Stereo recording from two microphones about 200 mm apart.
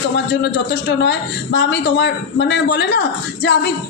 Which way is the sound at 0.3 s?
60° left (ahead or behind).